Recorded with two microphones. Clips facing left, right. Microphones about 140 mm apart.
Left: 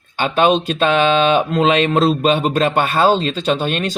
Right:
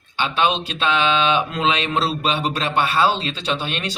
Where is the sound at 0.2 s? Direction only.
45° left (ahead or behind).